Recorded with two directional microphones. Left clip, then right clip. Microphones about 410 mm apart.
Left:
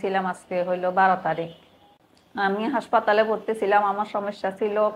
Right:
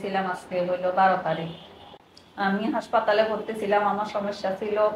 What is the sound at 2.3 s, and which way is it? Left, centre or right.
A woman's voice, left.